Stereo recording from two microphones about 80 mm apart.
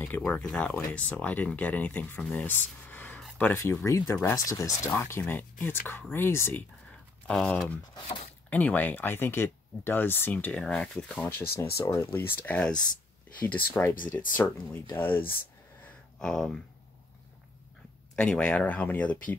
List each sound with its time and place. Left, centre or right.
0.0 s speech: left
3.8 s speech: left
4.5 s speech: left
4.9 s speech: left
6.9 s a sound: centre
8.5 s speech: centre
11.9 s speech: left
12.4 s speech: centre
16.2 s speech: centre
18.1 s speech: centre